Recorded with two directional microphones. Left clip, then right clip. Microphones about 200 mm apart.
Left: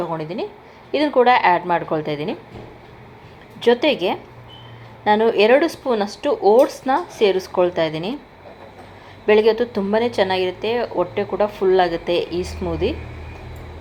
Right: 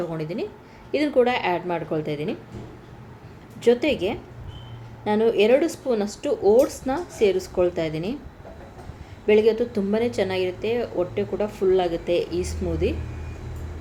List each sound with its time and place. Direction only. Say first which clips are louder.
0.1 s a woman's voice: left 4 dB; 5° right (ahead or behind)
3.6 s speech: left 4 dB; centre (ahead or behind)
9.2 s speech: left 4 dB; centre (ahead or behind)